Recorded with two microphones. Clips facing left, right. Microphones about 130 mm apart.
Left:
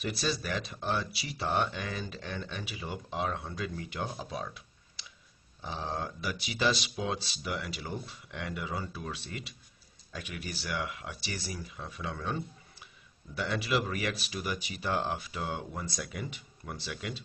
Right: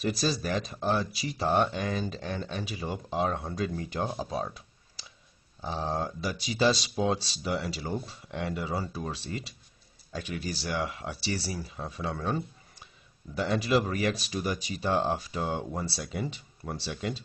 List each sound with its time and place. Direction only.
0.0 s speech: 40° right (ahead or behind)
5.0 s a sound: 35° right (ahead or behind)
5.6 s speech: 35° right (ahead or behind)